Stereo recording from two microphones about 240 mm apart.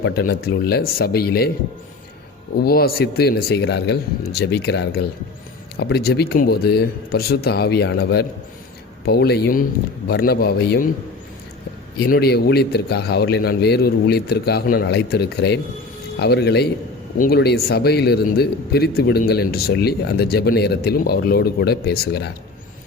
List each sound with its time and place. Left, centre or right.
0.0 s speech: left
2.6 s speech: left
11.9 s speech: left